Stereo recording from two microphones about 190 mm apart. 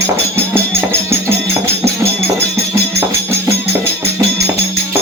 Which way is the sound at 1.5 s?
15° right (ahead or behind).